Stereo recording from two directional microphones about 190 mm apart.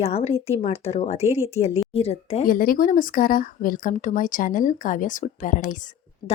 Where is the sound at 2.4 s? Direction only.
50° left (ahead or behind).